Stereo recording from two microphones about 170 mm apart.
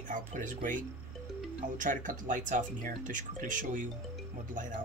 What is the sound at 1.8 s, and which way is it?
Speech, 50° right (ahead or behind).